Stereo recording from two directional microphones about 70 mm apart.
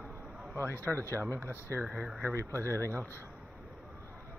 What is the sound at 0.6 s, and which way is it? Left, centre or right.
Speech, left.